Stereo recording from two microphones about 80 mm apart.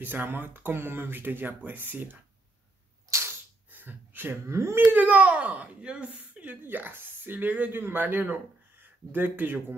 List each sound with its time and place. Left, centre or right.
0.0 s a child's voice: right
3.1 s a sound: right
3.7 s speech: right
4.9 s a child's voice: centre